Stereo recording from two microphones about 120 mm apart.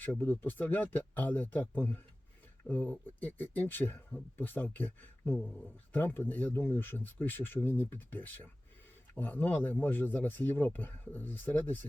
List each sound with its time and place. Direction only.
0.0 s speech: 15° left (ahead or behind)